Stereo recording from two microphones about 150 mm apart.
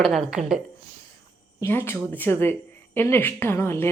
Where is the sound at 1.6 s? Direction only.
15° left (ahead or behind).